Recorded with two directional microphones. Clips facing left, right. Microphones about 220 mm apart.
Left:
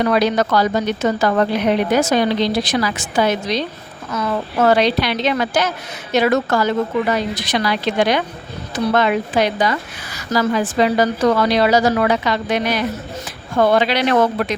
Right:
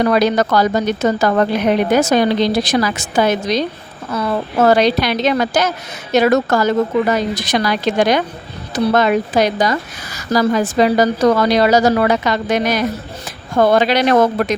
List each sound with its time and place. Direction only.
0.0 s a woman's voice: 45° right (ahead or behind)